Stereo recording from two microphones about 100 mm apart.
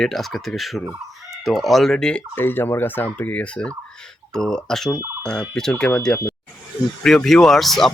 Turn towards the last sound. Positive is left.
turn(degrees=0)  # may be behind; listen again after turning